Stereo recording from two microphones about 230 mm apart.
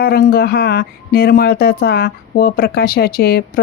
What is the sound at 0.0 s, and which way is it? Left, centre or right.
Speech, left.